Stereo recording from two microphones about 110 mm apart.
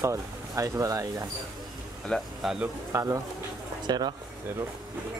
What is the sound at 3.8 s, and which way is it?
Speech, 40° right (ahead or behind).